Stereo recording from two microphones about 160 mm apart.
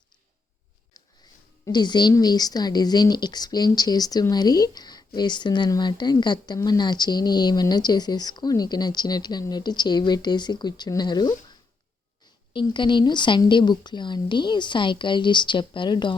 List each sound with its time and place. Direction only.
1.6 s speech: 25° left (ahead or behind)
12.5 s speech: 30° left (ahead or behind)